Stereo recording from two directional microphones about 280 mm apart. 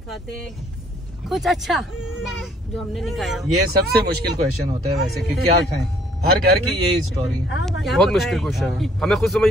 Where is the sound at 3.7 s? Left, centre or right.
Right.